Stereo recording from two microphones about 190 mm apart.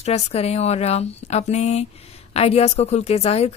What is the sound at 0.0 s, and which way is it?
A woman's voice, 35° left (ahead or behind).